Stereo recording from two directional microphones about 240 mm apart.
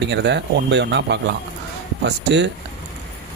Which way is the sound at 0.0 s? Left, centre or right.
Right.